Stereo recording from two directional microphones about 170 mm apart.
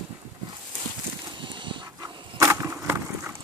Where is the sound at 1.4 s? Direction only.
30° right (ahead or behind).